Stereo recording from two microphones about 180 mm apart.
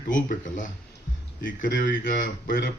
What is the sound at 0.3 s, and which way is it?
A man's voice, 45° left (ahead or behind).